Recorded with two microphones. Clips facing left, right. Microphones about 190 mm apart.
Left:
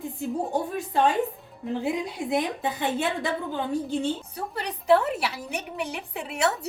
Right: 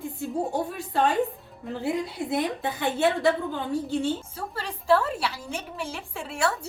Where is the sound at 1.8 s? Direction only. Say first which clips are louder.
Right 3 dB; 15° left (ahead or behind).